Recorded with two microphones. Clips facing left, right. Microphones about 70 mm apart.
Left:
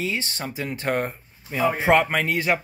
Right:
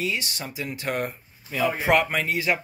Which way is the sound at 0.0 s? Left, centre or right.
Left.